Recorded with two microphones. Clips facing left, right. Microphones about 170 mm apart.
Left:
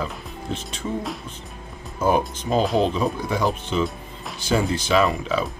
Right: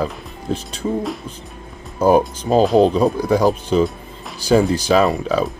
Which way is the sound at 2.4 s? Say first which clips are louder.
Right 7 dB; 35° right (ahead or behind).